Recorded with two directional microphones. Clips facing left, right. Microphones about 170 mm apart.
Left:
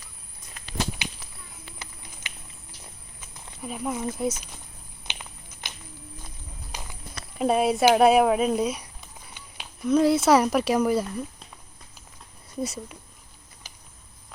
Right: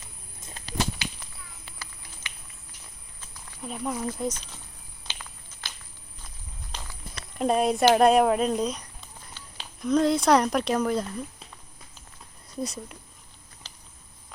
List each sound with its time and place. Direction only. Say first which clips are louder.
0.6 s walk: right 2 dB; 30° right (ahead or behind)
1.8 s music: right 1 dB; 20° left (ahead or behind)
3.6 s speech: left 1 dB; 5° left (ahead or behind)
5.0 s a sound: left 2 dB; 20° left (ahead or behind)
6.7 s walk: left 1 dB; 10° left (ahead or behind)
7.3 s speech: left 1 dB; 5° left (ahead or behind)
12.6 s speech: left 2 dB; 5° left (ahead or behind)